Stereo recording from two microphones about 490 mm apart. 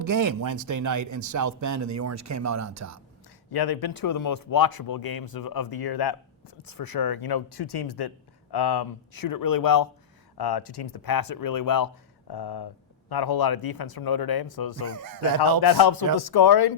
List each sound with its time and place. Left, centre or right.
0.0 s speech: right
3.5 s speech: left
14.8 s speech: right
15.6 s speech: left